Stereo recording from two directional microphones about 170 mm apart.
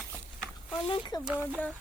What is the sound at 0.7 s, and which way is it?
Speech, 30° left (ahead or behind).